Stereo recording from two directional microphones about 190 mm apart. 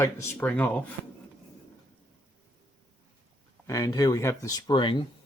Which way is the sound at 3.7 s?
20° left (ahead or behind).